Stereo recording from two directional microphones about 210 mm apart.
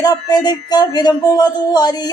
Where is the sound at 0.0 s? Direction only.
20° left (ahead or behind).